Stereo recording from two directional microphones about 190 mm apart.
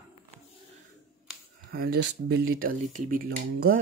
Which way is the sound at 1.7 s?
55° right (ahead or behind).